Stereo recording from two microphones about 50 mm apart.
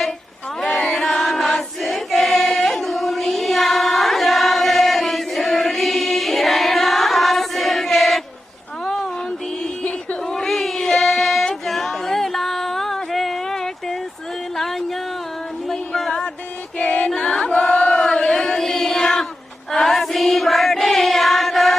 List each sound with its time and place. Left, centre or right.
0.8 s chant: centre
1.8 s choir: centre
10.2 s a sound: centre
10.9 s child singing: centre
11.6 s a sound: centre
14.5 s music: centre
15.7 s a sound: centre
16.7 s choir: left
17.5 s chant: left; by 19.2 s centre
19.7 s choir: centre